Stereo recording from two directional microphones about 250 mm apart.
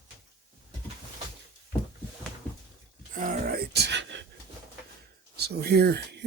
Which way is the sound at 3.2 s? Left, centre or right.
Right.